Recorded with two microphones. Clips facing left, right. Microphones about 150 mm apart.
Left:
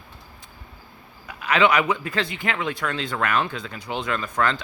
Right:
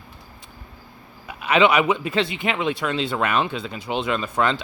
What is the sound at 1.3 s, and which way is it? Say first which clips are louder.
A man's voice: right 2 dB; 20° right (ahead or behind).